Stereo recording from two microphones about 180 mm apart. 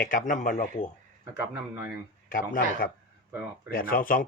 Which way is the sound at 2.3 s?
50° left (ahead or behind).